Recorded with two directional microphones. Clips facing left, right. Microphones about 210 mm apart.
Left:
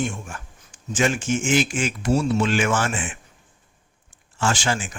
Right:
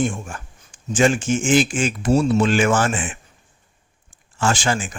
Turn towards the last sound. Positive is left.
turn(degrees=-45)  # may be behind; listen again after turning